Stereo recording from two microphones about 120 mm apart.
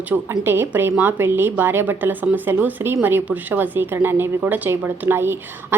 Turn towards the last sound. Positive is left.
turn(degrees=-20)  # may be behind; listen again after turning